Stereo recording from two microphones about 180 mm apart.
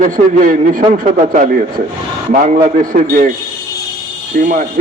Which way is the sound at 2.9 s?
50° right (ahead or behind).